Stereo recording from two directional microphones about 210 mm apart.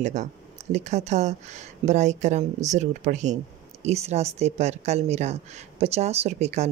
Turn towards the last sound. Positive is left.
turn(degrees=-30)  # may be behind; listen again after turning